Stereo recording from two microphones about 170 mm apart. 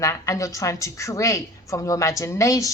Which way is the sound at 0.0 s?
20° left (ahead or behind).